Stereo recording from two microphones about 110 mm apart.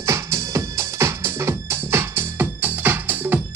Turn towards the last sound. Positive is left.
turn(degrees=-15)  # may be behind; listen again after turning